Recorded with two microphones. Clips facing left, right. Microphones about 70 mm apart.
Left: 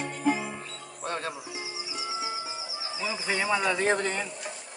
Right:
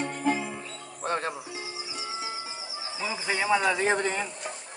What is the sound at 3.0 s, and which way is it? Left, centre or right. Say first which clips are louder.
Speech: right 1 dB; centre.